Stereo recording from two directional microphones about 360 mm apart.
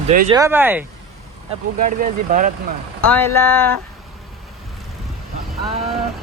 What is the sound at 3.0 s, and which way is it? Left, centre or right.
Speech, centre.